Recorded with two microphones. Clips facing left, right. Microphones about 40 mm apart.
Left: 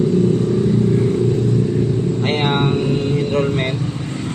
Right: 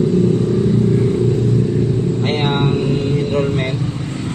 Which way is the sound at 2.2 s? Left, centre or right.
Left.